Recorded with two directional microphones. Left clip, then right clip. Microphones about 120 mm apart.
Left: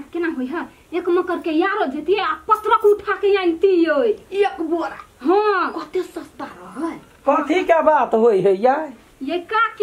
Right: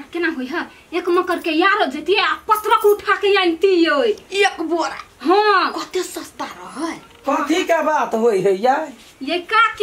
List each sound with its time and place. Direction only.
0.1 s a woman's voice: 5° right (ahead or behind)
7.6 s speech: 35° left (ahead or behind)
9.2 s a woman's voice: 5° right (ahead or behind)